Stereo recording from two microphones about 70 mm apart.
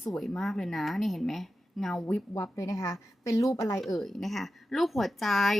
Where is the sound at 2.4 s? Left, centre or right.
Left.